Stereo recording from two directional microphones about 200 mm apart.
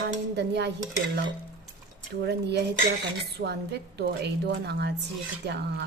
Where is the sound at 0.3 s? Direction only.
60° right (ahead or behind).